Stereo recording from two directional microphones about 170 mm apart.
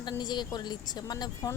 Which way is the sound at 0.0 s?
25° left (ahead or behind).